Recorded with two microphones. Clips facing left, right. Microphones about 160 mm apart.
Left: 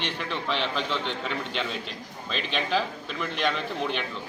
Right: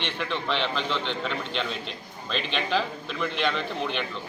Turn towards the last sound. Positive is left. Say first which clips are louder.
# even
turn(degrees=5)  # may be behind; listen again after turning